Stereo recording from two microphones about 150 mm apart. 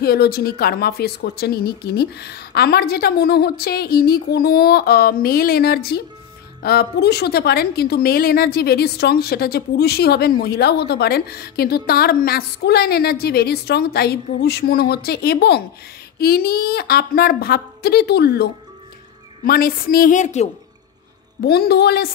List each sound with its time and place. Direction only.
0.0 s a woman's voice: 90° left
19.4 s a woman's voice: 80° left; by 20.4 s 50° left (ahead or behind)
21.4 s a woman's voice: 90° left